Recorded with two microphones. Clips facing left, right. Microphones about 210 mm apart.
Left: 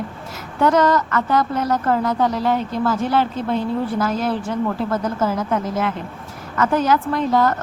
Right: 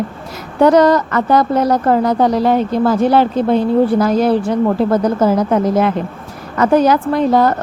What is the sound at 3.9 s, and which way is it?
Speech, 35° right (ahead or behind).